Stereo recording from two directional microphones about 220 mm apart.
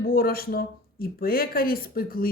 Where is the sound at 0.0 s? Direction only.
40° left (ahead or behind).